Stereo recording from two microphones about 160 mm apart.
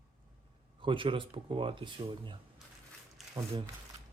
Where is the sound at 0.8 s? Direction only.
30° right (ahead or behind).